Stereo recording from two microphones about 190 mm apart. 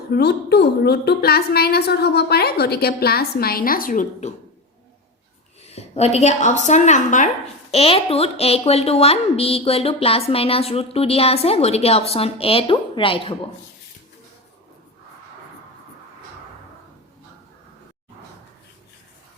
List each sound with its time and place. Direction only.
0.1 s a woman's voice: 60° left (ahead or behind)
5.7 s a woman's voice: 35° left (ahead or behind)